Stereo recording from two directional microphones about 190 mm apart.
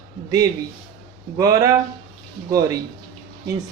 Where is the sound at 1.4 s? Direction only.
15° right (ahead or behind).